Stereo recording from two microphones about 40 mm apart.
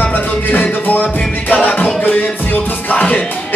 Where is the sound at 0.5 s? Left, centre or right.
Left.